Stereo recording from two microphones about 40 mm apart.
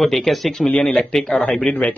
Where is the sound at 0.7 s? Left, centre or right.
Left.